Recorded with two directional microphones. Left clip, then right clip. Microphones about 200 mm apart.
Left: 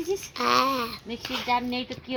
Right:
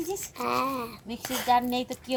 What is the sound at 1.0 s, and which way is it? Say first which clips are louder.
Speech: right 2 dB; 20° right (ahead or behind).